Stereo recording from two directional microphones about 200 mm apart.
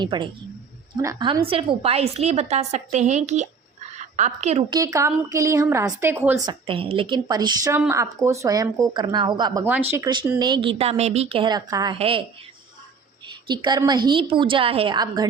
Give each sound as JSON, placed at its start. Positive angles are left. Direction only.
{"t": 0.0, "sound": "a woman's voice", "side_deg": -20}
{"t": 4.7, "sound": "a woman's voice", "side_deg": -15}
{"t": 13.5, "sound": "a woman's voice", "side_deg": -20}